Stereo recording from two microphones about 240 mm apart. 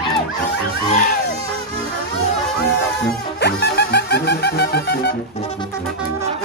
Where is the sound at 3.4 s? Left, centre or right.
Left.